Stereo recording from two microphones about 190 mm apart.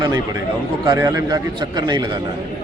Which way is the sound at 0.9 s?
20° right (ahead or behind).